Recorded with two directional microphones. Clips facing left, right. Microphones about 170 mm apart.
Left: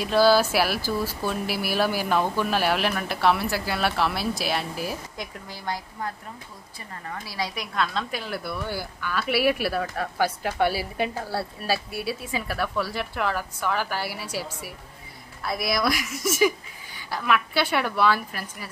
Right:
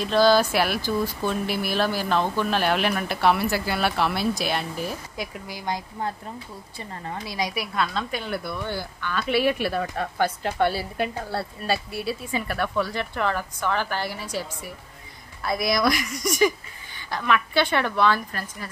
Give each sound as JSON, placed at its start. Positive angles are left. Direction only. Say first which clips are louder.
{"t": 0.0, "sound": "a woman's voice", "louder": "even", "side_deg": 10}
{"t": 5.7, "sound": "speech", "louder": "right 2 dB", "side_deg": -25}
{"t": 7.5, "sound": "a woman's voice", "louder": "right 1 dB", "side_deg": -5}